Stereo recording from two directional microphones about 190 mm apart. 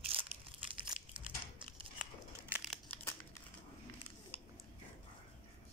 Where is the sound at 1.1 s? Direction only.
25° right (ahead or behind).